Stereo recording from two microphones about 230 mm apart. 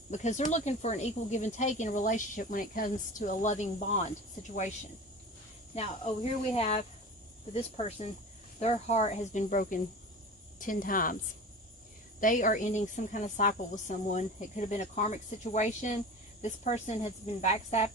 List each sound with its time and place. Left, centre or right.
0.1 s speech: left
5.7 s speech: left
12.2 s speech: left